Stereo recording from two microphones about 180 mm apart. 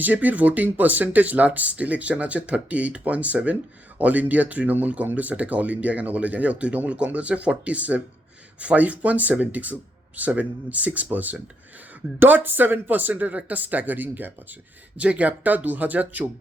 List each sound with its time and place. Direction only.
0.0 s speech: 10° right (ahead or behind)